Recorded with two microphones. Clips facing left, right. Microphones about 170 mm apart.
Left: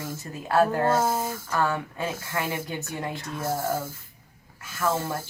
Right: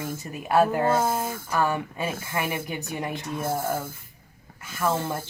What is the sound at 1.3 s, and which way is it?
Speech, 15° right (ahead or behind).